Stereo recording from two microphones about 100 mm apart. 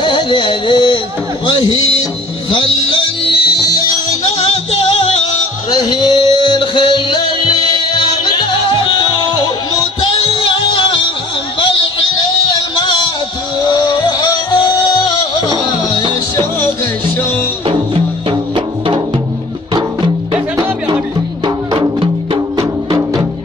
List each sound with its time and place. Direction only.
0.0 s music: 55° left (ahead or behind)
3.3 s music: 50° left (ahead or behind)
5.7 s music: 45° left (ahead or behind)
10.2 s music: 65° left (ahead or behind)
12.4 s music: 50° left (ahead or behind)
22.6 s music: 35° right (ahead or behind)